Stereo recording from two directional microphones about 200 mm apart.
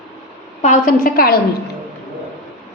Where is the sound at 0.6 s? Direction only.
40° left (ahead or behind).